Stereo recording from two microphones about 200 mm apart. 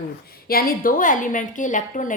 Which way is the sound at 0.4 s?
45° left (ahead or behind).